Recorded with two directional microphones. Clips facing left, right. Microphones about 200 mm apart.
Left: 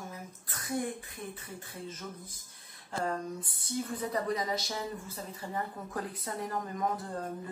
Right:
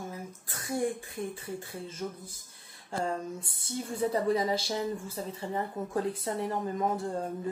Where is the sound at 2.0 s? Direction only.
30° right (ahead or behind).